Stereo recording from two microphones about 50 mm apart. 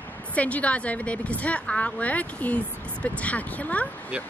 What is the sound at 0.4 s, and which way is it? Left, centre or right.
A woman's voice, left.